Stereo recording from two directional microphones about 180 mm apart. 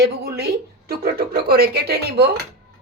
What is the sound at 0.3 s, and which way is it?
Speech, 60° right (ahead or behind).